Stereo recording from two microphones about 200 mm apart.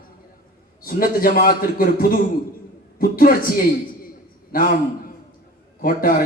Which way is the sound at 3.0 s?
45° left (ahead or behind).